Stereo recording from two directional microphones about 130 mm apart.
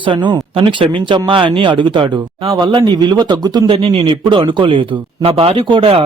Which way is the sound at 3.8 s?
45° right (ahead or behind).